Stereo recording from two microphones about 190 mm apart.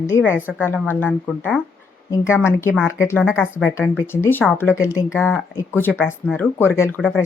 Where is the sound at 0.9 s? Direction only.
10° left (ahead or behind).